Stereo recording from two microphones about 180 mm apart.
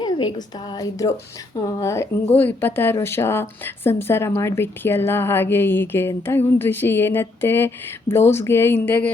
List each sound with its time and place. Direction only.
0.0 s a woman's voice: 25° left (ahead or behind)